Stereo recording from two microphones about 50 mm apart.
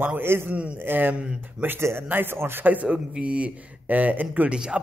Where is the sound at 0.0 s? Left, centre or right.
Right.